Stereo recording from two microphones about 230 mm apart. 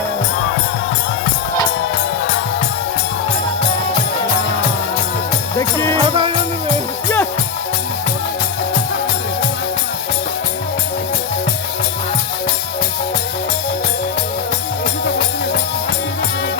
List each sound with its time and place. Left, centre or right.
5.5 s speech: centre
6.1 s music: right